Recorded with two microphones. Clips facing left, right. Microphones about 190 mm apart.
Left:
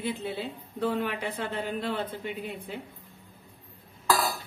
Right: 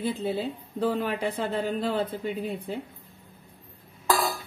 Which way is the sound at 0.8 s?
30° right (ahead or behind).